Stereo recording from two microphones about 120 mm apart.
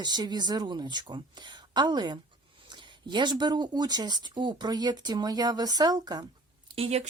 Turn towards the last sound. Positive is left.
turn(degrees=-65)  # may be behind; listen again after turning